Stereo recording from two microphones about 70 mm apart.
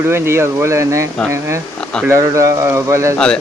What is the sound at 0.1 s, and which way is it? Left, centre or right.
Speech, right.